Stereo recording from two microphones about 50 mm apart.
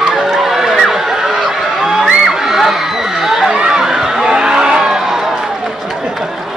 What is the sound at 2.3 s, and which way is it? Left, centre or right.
Children shouting, centre.